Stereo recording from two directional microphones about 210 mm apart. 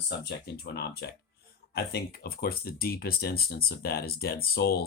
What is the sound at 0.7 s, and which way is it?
Speech, 50° left (ahead or behind).